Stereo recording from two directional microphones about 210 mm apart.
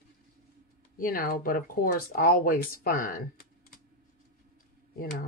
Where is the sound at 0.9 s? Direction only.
45° left (ahead or behind).